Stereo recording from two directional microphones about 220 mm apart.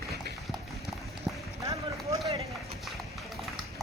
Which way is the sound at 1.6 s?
15° right (ahead or behind).